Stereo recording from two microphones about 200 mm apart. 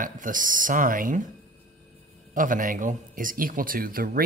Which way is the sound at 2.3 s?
40° right (ahead or behind).